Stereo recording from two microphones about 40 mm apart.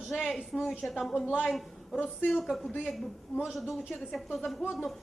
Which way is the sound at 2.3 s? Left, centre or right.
Centre.